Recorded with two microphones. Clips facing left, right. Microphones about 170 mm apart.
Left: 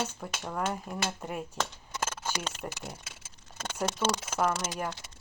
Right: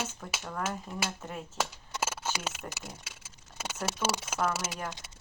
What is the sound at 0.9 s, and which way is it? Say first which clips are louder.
Speech: left 2 dB; 10° left (ahead or behind).